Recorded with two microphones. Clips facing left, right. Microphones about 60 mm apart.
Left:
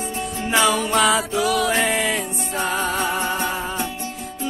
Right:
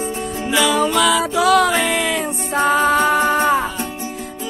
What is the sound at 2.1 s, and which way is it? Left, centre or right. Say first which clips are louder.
Music: right 5 dB; right.